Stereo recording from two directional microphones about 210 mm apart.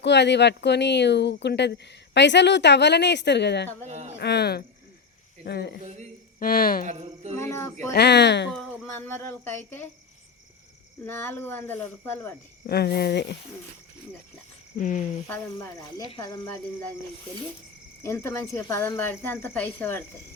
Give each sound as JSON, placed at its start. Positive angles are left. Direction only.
{"t": 0.0, "sound": "speech", "side_deg": 55}
{"t": 3.8, "sound": "speech", "side_deg": -35}
{"t": 4.2, "sound": "speech", "side_deg": 50}
{"t": 6.8, "sound": "speech", "side_deg": -35}
{"t": 7.3, "sound": "a woman's voice", "side_deg": 10}
{"t": 7.9, "sound": "speech", "side_deg": 55}
{"t": 8.4, "sound": "speech", "side_deg": -5}
{"t": 9.0, "sound": "a woman's voice", "side_deg": 10}
{"t": 11.0, "sound": "a woman's voice", "side_deg": 10}
{"t": 12.6, "sound": "speech", "side_deg": 50}
{"t": 14.8, "sound": "speech", "side_deg": 40}
{"t": 15.3, "sound": "a woman's voice", "side_deg": 15}
{"t": 18.0, "sound": "a woman's voice", "side_deg": 10}